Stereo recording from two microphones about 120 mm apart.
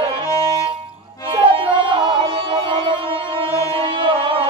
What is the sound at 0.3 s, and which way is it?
Music, 30° left (ahead or behind).